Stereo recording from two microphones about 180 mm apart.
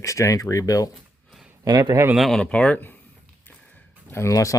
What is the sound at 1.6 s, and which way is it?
Speech, 20° right (ahead or behind).